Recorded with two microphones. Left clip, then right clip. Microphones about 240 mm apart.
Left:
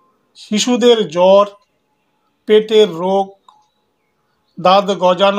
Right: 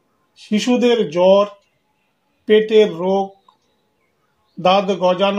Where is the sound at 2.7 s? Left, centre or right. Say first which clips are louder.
Left 2 dB; left.